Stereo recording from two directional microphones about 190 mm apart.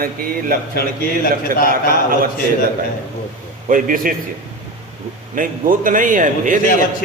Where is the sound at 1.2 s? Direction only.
50° left (ahead or behind).